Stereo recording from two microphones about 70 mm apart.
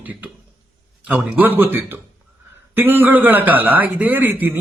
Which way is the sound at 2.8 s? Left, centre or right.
Right.